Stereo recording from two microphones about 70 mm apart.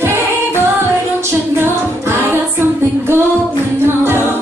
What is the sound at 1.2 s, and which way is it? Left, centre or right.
Music, right.